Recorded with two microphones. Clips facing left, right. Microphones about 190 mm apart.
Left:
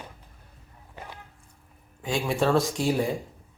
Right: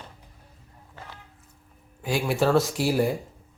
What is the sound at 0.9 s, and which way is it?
Walk, 15° left (ahead or behind).